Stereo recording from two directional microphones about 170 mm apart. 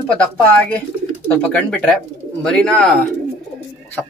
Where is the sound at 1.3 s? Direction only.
5° left (ahead or behind).